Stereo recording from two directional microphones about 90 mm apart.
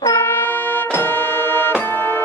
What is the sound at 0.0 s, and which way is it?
Music, 25° left (ahead or behind).